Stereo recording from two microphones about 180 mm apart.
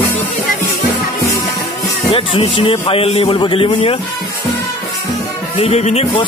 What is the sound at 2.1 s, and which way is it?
A man's voice, 30° left (ahead or behind).